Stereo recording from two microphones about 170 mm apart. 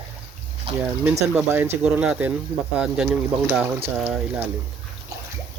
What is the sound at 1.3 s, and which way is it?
Speech, 10° right (ahead or behind).